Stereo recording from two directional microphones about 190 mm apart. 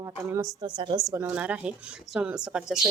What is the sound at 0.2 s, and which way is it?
Speech, 10° right (ahead or behind).